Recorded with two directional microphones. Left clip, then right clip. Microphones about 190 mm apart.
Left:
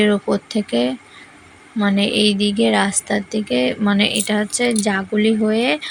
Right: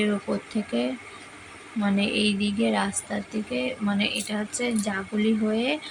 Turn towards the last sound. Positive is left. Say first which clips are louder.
# left 8 dB
turn(degrees=35)  # may be behind; listen again after turning